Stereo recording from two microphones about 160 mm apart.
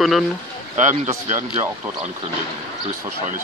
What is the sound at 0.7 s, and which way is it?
Speech, 50° right (ahead or behind).